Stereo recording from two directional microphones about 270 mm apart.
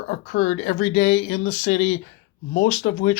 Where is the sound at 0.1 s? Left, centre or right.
Left.